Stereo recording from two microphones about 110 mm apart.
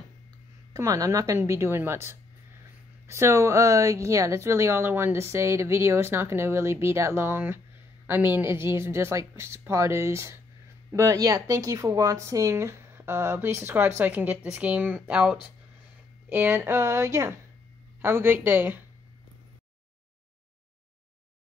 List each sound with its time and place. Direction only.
0.7 s speech: 30° right (ahead or behind); by 15.3 s 10° right (ahead or behind)
16.3 s speech: 20° right (ahead or behind)